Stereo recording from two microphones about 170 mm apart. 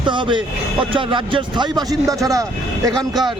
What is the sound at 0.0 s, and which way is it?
A man's voice, 30° right (ahead or behind).